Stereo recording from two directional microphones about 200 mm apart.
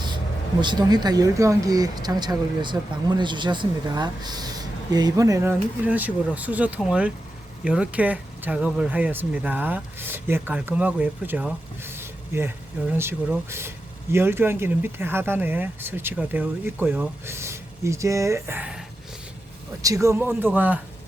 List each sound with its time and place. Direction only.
0.6 s speech: 20° right (ahead or behind)
19.8 s speech: 15° right (ahead or behind)